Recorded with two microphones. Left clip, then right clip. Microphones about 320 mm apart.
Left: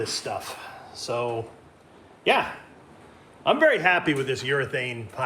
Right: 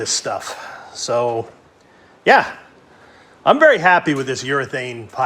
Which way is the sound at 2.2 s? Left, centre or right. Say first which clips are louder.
Right 10 dB; right.